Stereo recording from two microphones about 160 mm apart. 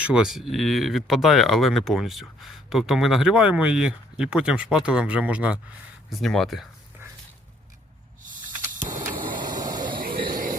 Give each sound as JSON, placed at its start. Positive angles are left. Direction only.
{"t": 0.1, "sound": "speech", "side_deg": -5}
{"t": 8.5, "sound": "vehicle", "side_deg": -25}
{"t": 10.2, "sound": "a sound", "side_deg": -60}